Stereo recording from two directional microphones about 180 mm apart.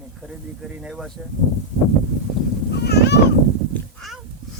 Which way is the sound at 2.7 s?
65° left (ahead or behind).